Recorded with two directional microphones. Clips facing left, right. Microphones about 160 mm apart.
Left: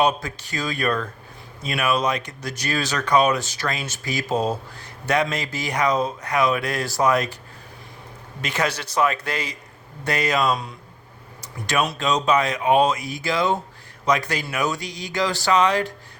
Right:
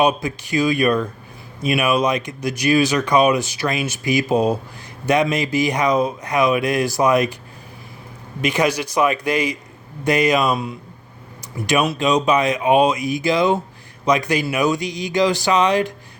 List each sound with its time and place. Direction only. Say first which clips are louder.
0.0 s speech: right 3 dB; 15° right (ahead or behind)
8.4 s speech: right 6 dB; 15° right (ahead or behind)